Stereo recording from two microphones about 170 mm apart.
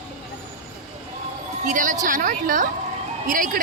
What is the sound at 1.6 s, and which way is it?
A woman's voice, 50° right (ahead or behind).